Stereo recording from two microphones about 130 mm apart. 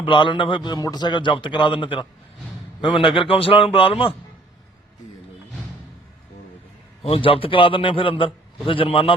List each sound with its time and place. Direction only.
0.0 s a man's voice: 40° left (ahead or behind)
7.0 s a man's voice: 45° left (ahead or behind)